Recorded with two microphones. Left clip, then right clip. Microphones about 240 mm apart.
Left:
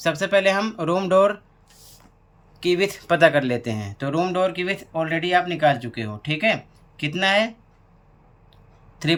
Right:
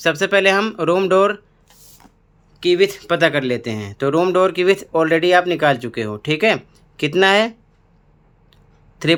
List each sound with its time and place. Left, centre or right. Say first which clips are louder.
0.0 s speech: right 4 dB; centre
2.6 s speech: right 6 dB; centre
9.0 s speech: right 6 dB; centre